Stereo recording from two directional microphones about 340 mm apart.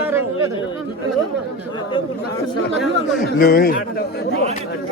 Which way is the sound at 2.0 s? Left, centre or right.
Centre.